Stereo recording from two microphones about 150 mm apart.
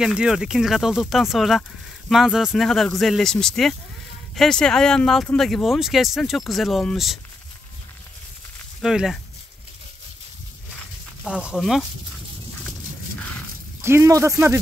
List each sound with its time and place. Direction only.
0.0 s speech: 5° right (ahead or behind)
8.8 s speech: centre (ahead or behind)
11.2 s speech: 5° right (ahead or behind)
13.7 s a man's voice: 15° right (ahead or behind)